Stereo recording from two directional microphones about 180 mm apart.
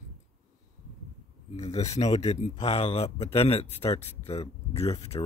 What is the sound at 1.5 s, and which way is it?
Speech, 40° left (ahead or behind).